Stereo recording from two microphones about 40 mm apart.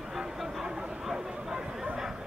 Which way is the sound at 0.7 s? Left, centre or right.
Centre.